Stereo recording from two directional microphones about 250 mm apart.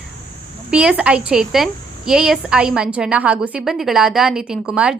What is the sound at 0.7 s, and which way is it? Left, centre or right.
Speech, centre.